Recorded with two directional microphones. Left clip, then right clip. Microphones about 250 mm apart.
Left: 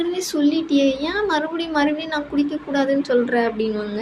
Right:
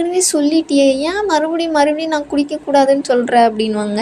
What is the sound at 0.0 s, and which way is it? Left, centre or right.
Speech, right.